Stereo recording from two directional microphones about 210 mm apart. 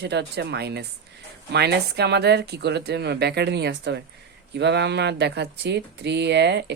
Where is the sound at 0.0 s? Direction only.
55° right (ahead or behind).